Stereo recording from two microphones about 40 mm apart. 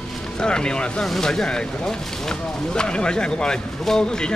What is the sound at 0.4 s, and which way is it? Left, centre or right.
Speech, left.